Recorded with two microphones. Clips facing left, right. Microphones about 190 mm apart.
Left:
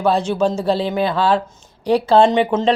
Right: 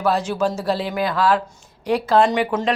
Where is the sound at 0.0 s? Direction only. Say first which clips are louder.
Left 3 dB; 25° left (ahead or behind).